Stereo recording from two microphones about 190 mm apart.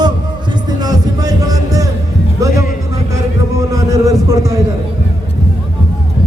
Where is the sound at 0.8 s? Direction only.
20° right (ahead or behind).